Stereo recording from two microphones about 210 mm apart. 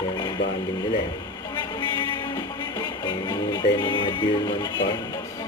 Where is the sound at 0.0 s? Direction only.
20° left (ahead or behind).